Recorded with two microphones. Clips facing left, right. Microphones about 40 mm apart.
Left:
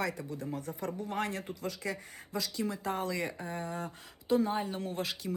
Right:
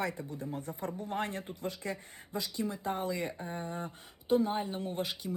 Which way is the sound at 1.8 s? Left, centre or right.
Left.